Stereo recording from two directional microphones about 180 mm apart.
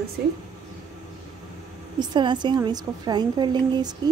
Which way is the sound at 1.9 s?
25° right (ahead or behind).